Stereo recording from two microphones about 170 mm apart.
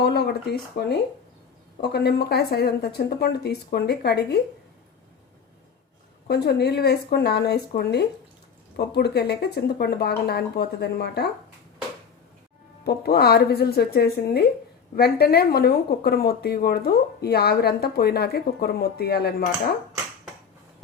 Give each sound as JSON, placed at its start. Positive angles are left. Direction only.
{"t": 0.0, "sound": "a sound", "side_deg": 70}
{"t": 1.8, "sound": "speech", "side_deg": 70}
{"t": 6.2, "sound": "speech", "side_deg": 70}
{"t": 12.8, "sound": "speech", "side_deg": 65}